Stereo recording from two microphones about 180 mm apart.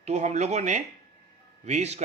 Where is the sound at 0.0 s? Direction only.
40° right (ahead or behind).